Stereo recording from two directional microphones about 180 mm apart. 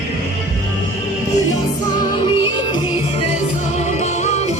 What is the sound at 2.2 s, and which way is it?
Music, 30° left (ahead or behind).